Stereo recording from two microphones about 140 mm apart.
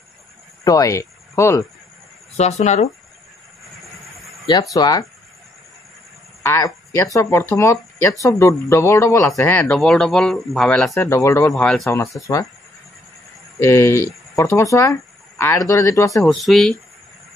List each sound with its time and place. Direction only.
0.7 s speech: 25° left (ahead or behind)
2.3 s speech: 50° left (ahead or behind)
3.8 s a sound: centre (ahead or behind)
4.5 s speech: 30° left (ahead or behind)
6.4 s speech: 20° left (ahead or behind); by 10.9 s 5° left (ahead or behind)
10.9 s speech: 20° left (ahead or behind)
11.5 s speech: 5° left (ahead or behind)
11.8 s speech: 20° left (ahead or behind)
13.6 s speech: 20° left (ahead or behind)
16.3 s speech: centre (ahead or behind)